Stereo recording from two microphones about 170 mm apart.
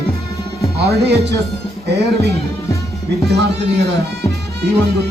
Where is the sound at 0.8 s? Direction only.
75° right (ahead or behind).